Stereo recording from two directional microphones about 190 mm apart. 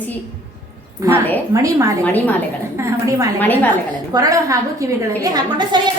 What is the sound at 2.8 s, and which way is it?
Speech, 15° right (ahead or behind).